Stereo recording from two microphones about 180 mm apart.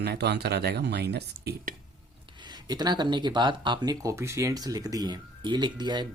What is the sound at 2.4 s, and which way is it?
Speech, 20° right (ahead or behind).